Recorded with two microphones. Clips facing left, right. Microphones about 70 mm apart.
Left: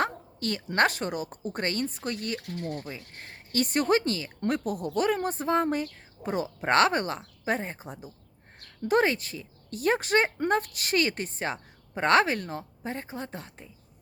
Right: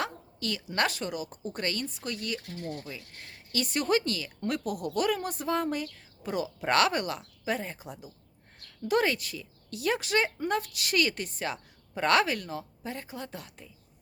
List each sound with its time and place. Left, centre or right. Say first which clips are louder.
0.0 s a woman's voice: left 5 dB; left
2.7 s speech: left 3 dB; left